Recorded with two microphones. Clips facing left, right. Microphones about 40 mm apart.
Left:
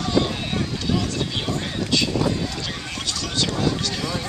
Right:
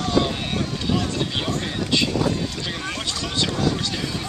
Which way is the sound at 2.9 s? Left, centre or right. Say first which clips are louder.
Left 2 dB; right.